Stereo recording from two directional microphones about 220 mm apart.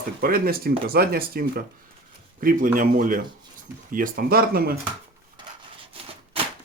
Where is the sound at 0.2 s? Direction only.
40° right (ahead or behind).